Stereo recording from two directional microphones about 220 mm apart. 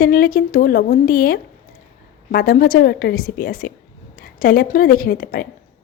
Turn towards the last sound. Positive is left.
turn(degrees=40)  # may be behind; listen again after turning